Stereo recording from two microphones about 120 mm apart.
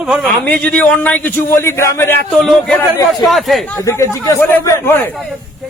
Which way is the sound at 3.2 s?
Centre (ahead or behind).